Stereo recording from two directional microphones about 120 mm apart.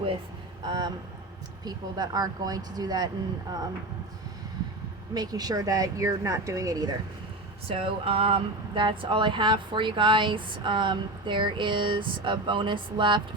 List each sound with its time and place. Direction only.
0.7 s speech: 35° right (ahead or behind)
5.1 s speech: 35° right (ahead or behind)
7.7 s speech: 50° right (ahead or behind)